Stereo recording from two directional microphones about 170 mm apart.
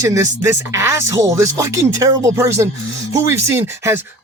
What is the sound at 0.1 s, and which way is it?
Speech, 15° right (ahead or behind).